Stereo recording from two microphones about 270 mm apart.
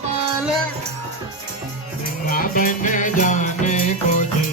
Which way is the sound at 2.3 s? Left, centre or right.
Left.